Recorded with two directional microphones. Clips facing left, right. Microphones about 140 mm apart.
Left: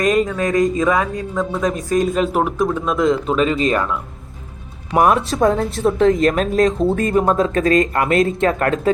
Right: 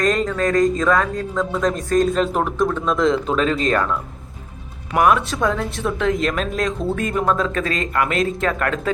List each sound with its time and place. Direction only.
0.0 s a man's voice: 10° left (ahead or behind)
4.9 s speech: 30° left (ahead or behind)
6.1 s speech: 45° left (ahead or behind)